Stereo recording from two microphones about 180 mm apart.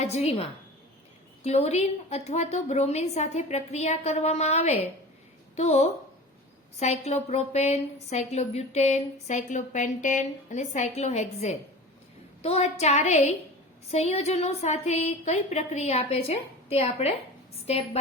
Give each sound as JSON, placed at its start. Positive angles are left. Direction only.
{"t": 0.0, "sound": "a woman's voice", "side_deg": 35}
{"t": 1.5, "sound": "a woman's voice", "side_deg": 35}